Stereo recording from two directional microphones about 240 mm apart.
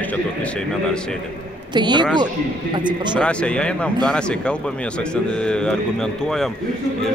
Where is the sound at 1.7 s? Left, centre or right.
Centre.